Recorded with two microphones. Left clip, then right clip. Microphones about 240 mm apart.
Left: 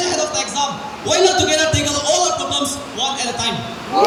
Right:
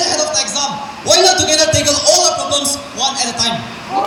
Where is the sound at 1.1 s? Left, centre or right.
Right.